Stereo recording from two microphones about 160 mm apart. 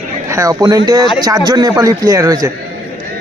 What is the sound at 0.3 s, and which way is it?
A man's voice, 20° right (ahead or behind).